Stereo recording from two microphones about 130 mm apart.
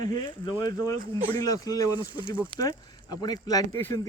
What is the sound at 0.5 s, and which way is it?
Speech, 25° left (ahead or behind).